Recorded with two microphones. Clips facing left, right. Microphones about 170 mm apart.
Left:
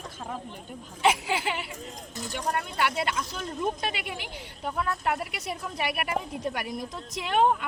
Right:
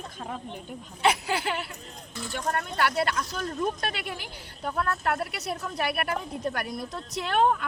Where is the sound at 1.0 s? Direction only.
10° left (ahead or behind).